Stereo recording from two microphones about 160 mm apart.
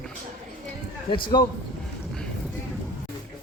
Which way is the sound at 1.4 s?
25° left (ahead or behind).